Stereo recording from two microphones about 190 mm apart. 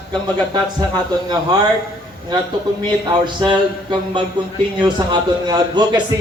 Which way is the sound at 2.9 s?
25° right (ahead or behind).